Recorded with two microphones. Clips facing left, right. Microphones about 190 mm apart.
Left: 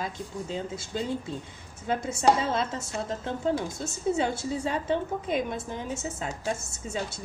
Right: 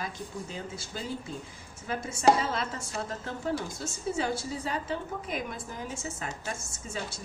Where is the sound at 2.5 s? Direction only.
25° left (ahead or behind).